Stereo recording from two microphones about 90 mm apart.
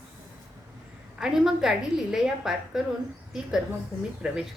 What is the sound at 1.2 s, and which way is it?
A woman's voice, 5° right (ahead or behind).